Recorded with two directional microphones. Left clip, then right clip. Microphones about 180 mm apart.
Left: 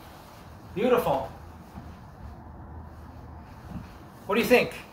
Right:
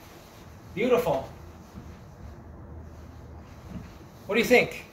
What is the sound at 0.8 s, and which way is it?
Speech, 5° right (ahead or behind).